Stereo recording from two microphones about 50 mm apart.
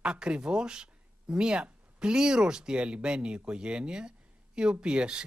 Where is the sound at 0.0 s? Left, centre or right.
Centre.